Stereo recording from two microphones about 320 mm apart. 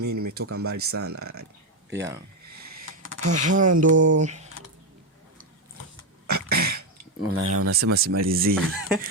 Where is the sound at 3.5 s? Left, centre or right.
Right.